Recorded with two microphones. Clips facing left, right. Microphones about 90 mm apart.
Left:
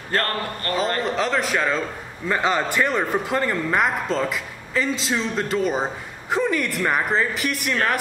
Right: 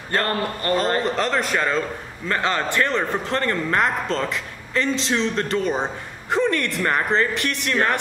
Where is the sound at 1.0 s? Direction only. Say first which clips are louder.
Even; centre (ahead or behind).